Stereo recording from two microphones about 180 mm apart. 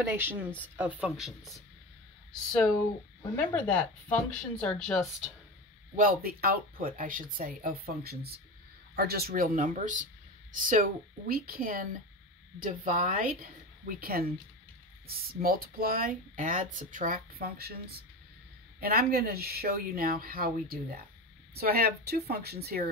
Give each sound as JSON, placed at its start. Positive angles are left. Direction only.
{"t": 0.0, "sound": "speech", "side_deg": -10}
{"t": 3.3, "sound": "speech", "side_deg": 10}
{"t": 5.9, "sound": "speech", "side_deg": -55}